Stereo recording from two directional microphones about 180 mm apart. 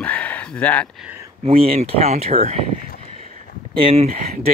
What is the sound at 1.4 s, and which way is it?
Speech, 30° right (ahead or behind).